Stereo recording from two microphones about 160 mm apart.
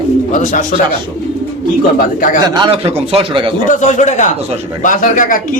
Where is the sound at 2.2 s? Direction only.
55° left (ahead or behind).